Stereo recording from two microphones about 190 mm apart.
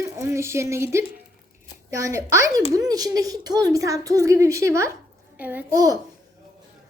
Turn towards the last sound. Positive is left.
turn(degrees=-10)  # may be behind; listen again after turning